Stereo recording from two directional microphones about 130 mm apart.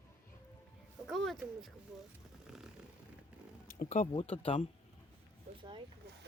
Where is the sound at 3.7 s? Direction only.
80° left.